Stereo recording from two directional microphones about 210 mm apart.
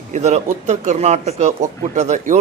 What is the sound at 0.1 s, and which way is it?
Speech, 35° right (ahead or behind).